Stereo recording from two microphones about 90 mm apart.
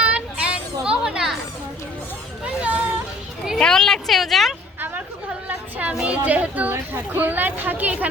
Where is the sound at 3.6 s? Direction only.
5° left (ahead or behind).